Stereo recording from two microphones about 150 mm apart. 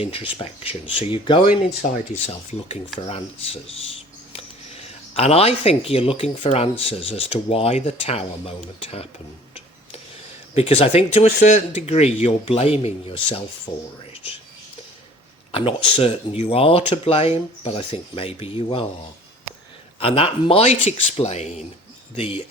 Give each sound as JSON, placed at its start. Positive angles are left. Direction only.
{"t": 0.0, "sound": "speech", "side_deg": 35}
{"t": 3.1, "sound": "speech", "side_deg": 40}
{"t": 10.5, "sound": "speech", "side_deg": 40}
{"t": 11.3, "sound": "speech", "side_deg": 50}
{"t": 15.5, "sound": "speech", "side_deg": 35}
{"t": 20.0, "sound": "speech", "side_deg": 40}
{"t": 22.1, "sound": "speech", "side_deg": 35}